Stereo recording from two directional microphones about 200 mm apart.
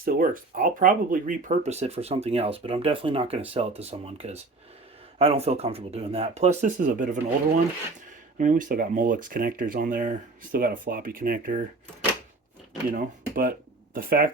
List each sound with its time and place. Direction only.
0.0 s speech: 45° right (ahead or behind)
8.4 s speech: 40° right (ahead or behind)
12.9 s speech: 45° right (ahead or behind)